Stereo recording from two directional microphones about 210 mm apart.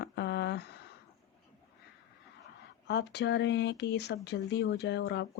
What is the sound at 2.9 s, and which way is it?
Speech, 55° left (ahead or behind).